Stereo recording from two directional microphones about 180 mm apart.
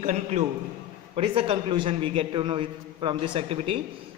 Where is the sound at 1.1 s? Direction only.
30° right (ahead or behind).